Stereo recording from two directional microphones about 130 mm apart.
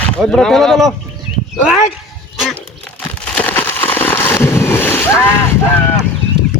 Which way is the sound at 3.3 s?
10° left (ahead or behind).